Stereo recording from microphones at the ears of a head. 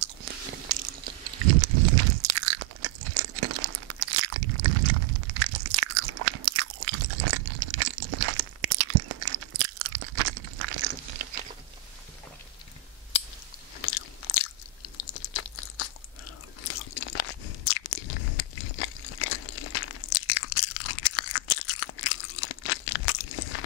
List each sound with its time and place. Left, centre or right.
0.0 s biting: right
13.7 s chewing: left
16.6 s crunch: left